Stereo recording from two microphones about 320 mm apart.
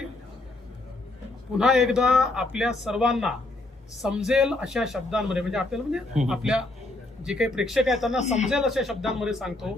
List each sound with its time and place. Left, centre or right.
1.5 s a man's voice: centre
8.2 s speech: left
8.4 s a man's voice: centre